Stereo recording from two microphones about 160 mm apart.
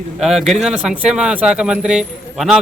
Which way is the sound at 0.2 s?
Centre (ahead or behind).